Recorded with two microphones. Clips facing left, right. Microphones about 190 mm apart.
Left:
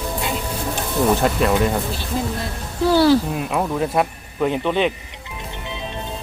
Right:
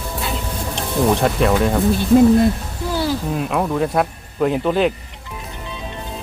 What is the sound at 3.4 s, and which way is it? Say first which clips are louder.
Speech: right 2 dB; centre (ahead or behind).